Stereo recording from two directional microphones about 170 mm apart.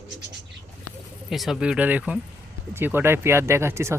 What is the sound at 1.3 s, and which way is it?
Speech, centre (ahead or behind).